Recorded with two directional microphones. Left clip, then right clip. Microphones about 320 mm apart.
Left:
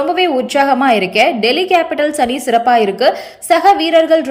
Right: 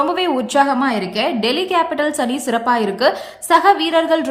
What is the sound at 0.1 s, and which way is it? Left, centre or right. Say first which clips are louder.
A woman's voice: left 4 dB; centre.